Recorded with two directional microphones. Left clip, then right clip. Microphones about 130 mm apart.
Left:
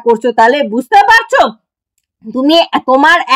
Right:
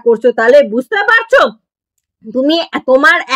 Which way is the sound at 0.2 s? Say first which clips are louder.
Right 2 dB; 20° left (ahead or behind).